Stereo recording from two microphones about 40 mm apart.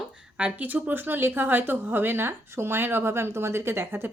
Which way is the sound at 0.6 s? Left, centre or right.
Right.